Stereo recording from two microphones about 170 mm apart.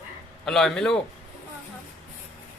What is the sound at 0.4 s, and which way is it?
Speech, 5° left (ahead or behind).